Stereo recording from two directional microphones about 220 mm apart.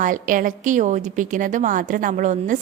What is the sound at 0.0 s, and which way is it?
A woman's voice, 35° right (ahead or behind).